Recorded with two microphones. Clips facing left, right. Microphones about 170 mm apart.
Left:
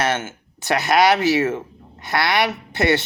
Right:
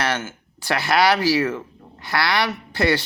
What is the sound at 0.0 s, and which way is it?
Speech, 25° left (ahead or behind).